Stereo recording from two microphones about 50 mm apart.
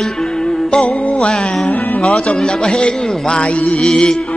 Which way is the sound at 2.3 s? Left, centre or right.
Centre.